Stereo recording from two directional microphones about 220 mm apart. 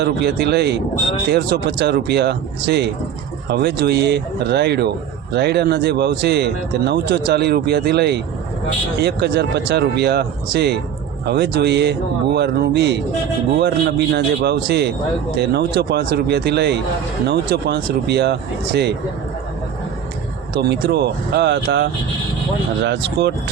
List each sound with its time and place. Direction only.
0.0 s speech: 50° right (ahead or behind)
20.6 s speech: 50° right (ahead or behind)